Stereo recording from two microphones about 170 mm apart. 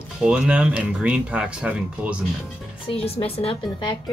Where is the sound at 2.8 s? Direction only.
35° left (ahead or behind).